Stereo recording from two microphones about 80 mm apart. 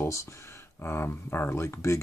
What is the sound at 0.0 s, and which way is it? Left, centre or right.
Speech, left.